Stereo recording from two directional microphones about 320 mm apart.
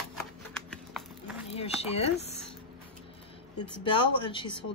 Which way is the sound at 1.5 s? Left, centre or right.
Centre.